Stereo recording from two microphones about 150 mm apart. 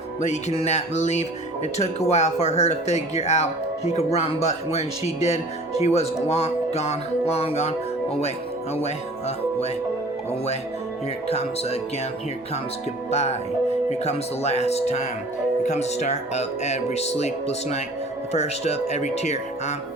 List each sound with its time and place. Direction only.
0.2 s speech: 50° left (ahead or behind)
11.3 s speech: 45° left (ahead or behind)
13.1 s speech: 50° left (ahead or behind)